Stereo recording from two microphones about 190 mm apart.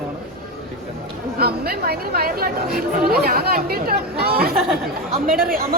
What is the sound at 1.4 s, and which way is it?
Speech, 55° right (ahead or behind).